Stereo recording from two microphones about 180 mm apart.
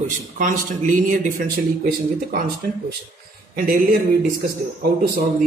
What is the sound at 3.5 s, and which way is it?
Speech, 55° right (ahead or behind).